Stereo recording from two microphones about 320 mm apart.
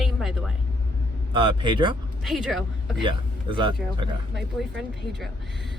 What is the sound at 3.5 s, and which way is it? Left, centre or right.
Speech, centre.